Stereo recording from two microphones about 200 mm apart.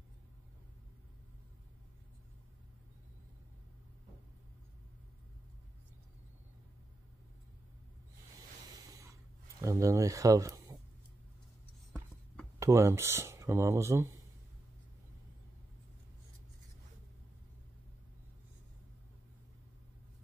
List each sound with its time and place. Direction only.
9.6 s speech: 15° right (ahead or behind)
12.5 s speech: 15° right (ahead or behind)